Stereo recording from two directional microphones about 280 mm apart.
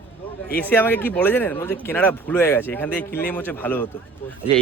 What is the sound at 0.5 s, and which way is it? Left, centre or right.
Speech, centre.